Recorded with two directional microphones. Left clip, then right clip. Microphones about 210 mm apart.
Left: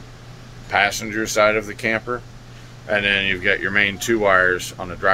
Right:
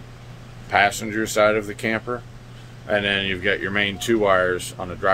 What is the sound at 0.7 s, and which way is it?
Speech, 10° right (ahead or behind).